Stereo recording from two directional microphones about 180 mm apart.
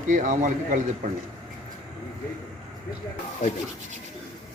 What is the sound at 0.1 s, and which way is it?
Speech, 45° right (ahead or behind).